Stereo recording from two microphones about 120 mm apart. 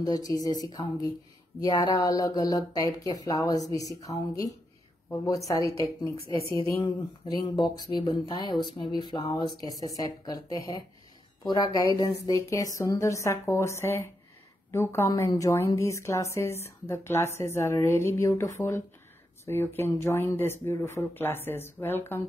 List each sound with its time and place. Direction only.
0.0 s a woman's voice: 30° left (ahead or behind)
7.3 s a woman's voice: 40° left (ahead or behind); by 22.2 s 20° left (ahead or behind)